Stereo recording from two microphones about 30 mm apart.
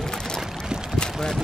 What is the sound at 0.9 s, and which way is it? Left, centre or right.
Vehicle, left.